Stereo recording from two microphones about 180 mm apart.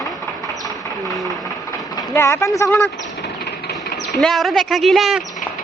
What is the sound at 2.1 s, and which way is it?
Speech, 15° left (ahead or behind).